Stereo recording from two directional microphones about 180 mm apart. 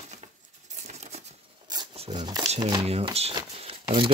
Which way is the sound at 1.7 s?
30° right (ahead or behind).